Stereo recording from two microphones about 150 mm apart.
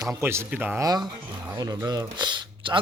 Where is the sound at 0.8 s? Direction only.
25° right (ahead or behind).